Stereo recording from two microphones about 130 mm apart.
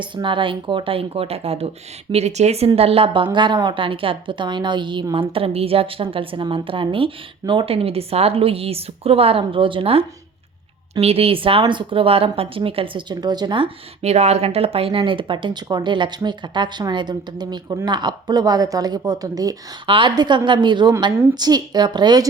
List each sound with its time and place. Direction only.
0.0 s a woman's voice: 40° right (ahead or behind)
14.0 s speech: 55° right (ahead or behind); by 22.3 s 30° right (ahead or behind)